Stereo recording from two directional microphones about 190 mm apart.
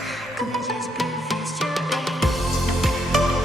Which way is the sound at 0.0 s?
Centre (ahead or behind).